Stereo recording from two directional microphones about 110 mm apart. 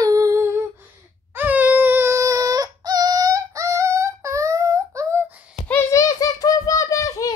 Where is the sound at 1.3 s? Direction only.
15° right (ahead or behind).